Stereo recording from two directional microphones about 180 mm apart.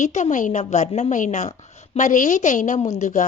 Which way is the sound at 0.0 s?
40° left (ahead or behind).